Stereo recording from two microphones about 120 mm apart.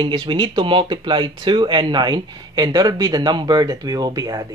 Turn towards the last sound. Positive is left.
turn(degrees=-30)  # may be behind; listen again after turning